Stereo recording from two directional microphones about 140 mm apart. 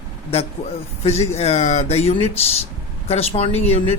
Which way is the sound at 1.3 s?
50° left (ahead or behind).